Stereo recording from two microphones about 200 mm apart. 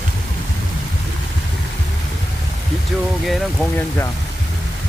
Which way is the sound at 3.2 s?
Centre (ahead or behind).